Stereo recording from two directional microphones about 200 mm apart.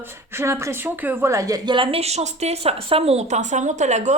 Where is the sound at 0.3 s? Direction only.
15° right (ahead or behind).